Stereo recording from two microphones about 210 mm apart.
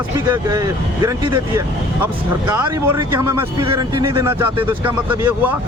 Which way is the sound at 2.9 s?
15° right (ahead or behind).